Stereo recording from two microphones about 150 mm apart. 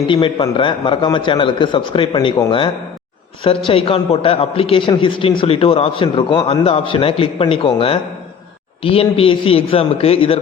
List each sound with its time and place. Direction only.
0.1 s a man's voice: 30° left (ahead or behind)